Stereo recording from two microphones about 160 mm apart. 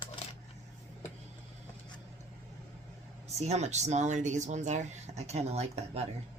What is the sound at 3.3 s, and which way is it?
Speech, 45° right (ahead or behind).